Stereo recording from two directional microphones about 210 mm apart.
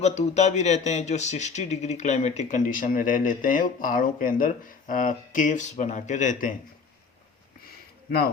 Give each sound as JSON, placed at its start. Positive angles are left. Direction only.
{"t": 0.0, "sound": "speech", "side_deg": 30}